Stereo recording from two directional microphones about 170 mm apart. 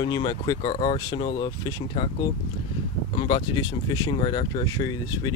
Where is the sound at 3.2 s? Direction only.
30° left (ahead or behind).